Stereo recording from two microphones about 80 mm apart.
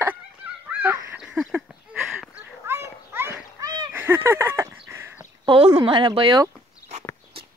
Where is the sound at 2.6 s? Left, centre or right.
Right.